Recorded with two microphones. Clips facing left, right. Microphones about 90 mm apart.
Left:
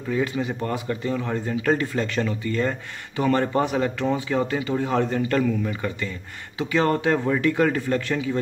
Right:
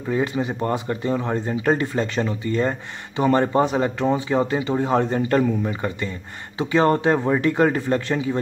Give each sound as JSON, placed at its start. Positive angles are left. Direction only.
{"t": 0.1, "sound": "speech", "side_deg": -25}